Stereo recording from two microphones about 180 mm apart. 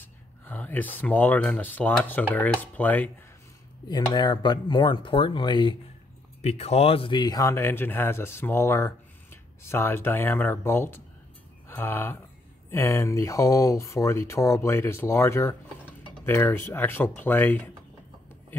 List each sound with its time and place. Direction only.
0.5 s speech: 10° left (ahead or behind)
3.9 s speech: 25° left (ahead or behind)